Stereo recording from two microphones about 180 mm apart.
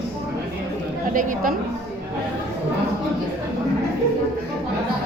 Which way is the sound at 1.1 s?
50° right (ahead or behind).